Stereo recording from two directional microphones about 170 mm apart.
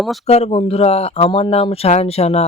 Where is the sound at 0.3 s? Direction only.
40° left (ahead or behind).